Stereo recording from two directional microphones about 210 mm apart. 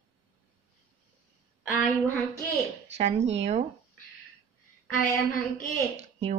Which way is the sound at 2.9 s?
30° right (ahead or behind).